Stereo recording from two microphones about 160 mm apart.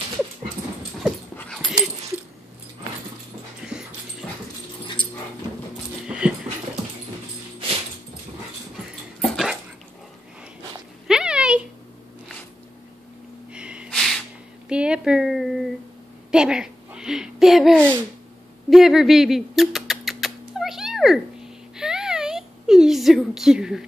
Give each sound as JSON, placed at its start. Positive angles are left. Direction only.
{"t": 1.3, "sound": "dog", "side_deg": 5}
{"t": 4.2, "sound": "dog", "side_deg": 5}
{"t": 5.0, "sound": "dog", "side_deg": 30}
{"t": 6.0, "sound": "dog", "side_deg": -5}
{"t": 9.2, "sound": "dog", "side_deg": 0}
{"t": 11.1, "sound": "a sound", "side_deg": -5}
{"t": 13.5, "sound": "snort", "side_deg": -5}
{"t": 14.7, "sound": "a sound", "side_deg": -5}
{"t": 18.7, "sound": "rodents", "side_deg": 0}